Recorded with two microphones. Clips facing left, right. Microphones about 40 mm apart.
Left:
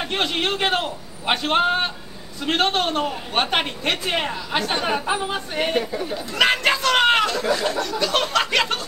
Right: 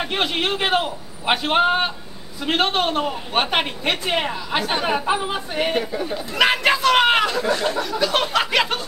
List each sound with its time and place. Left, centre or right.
0.0 s a man's voice: centre